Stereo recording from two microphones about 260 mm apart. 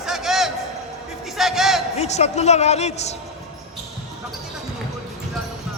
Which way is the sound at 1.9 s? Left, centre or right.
Left.